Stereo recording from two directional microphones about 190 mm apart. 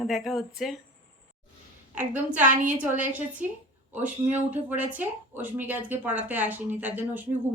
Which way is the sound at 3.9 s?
10° right (ahead or behind).